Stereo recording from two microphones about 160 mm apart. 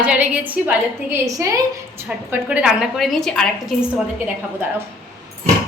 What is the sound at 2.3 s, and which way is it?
A woman's voice, 5° right (ahead or behind).